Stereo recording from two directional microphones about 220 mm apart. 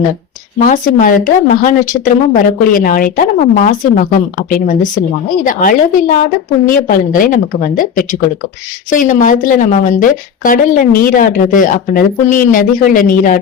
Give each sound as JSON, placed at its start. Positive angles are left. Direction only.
{"t": 0.6, "sound": "a woman's voice", "side_deg": 35}